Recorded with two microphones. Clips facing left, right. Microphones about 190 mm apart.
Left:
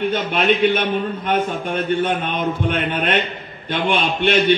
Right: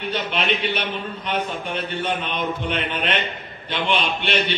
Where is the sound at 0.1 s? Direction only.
50° left (ahead or behind).